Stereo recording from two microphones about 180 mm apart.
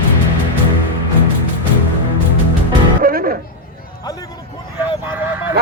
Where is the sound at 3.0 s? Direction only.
55° right (ahead or behind).